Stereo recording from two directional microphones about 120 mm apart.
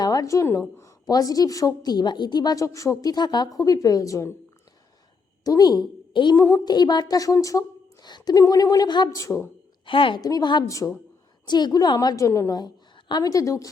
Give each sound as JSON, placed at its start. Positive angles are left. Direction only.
{"t": 0.0, "sound": "a woman's voice", "side_deg": 30}
{"t": 5.4, "sound": "a woman's voice", "side_deg": 30}
{"t": 6.3, "sound": "a woman's voice", "side_deg": 20}
{"t": 6.7, "sound": "a woman's voice", "side_deg": 35}
{"t": 9.8, "sound": "a woman's voice", "side_deg": 45}
{"t": 10.2, "sound": "a woman's voice", "side_deg": 30}
{"t": 11.4, "sound": "a woman's voice", "side_deg": 35}